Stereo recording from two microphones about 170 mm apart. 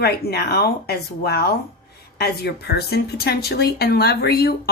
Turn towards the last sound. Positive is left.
turn(degrees=65)  # may be behind; listen again after turning